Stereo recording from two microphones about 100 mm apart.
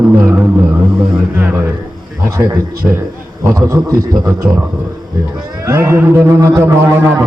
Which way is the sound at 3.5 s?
35° right (ahead or behind).